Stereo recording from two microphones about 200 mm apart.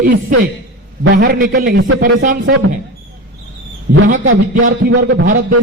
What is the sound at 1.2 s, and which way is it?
A man's voice, 45° right (ahead or behind).